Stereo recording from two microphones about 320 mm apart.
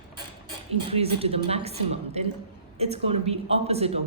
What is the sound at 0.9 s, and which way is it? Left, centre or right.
A woman's voice, centre.